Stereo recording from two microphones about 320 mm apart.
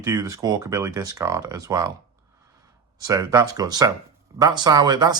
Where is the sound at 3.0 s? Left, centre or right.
Centre.